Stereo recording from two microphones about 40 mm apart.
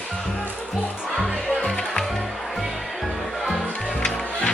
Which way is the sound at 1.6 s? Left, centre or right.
Centre.